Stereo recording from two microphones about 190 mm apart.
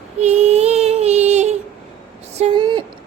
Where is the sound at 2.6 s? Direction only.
25° right (ahead or behind).